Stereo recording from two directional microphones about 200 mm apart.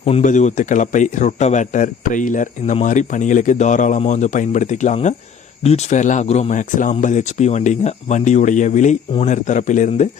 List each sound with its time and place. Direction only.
0.0 s speech: 35° left (ahead or behind)